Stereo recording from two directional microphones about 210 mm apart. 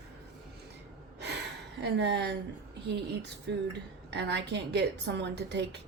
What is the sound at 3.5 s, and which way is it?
A woman's voice, 55° right (ahead or behind).